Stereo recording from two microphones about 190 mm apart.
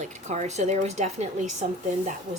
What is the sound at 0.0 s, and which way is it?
Speech, 40° right (ahead or behind).